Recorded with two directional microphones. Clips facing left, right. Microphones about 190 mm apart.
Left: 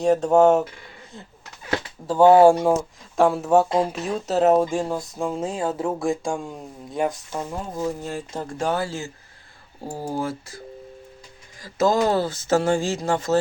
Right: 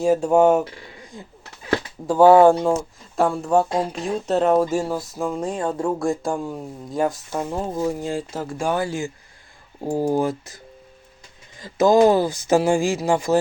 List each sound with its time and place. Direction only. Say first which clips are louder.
0.0 s speech: even; 5° right (ahead or behind)
2.1 s speech: right 1 dB; 20° left (ahead or behind)
2.5 s speech: even; 10° left (ahead or behind)
5.3 s speech: right 2 dB; 25° left (ahead or behind)
5.5 s speech: right 2 dB; 5° left (ahead or behind)
7.8 s speech: right 2 dB; 10° right (ahead or behind)
10.2 s speech: right 5 dB; 20° right (ahead or behind)
11.6 s speech: right 5 dB; 15° right (ahead or behind)